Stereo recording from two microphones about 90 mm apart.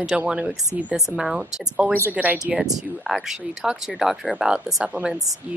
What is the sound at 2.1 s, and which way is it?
Speech, 20° right (ahead or behind).